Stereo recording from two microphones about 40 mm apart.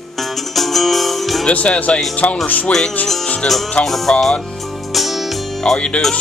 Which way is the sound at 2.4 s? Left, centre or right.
Left.